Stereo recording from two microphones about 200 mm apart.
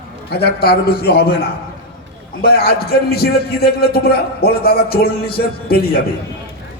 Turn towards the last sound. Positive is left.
turn(degrees=50)  # may be behind; listen again after turning